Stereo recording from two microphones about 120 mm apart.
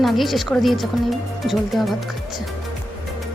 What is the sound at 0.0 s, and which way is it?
Speech, centre (ahead or behind).